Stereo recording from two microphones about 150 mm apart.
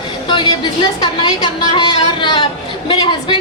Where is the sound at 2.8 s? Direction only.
30° left (ahead or behind).